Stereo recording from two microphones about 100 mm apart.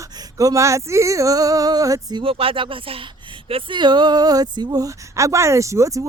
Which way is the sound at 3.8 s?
45° right (ahead or behind).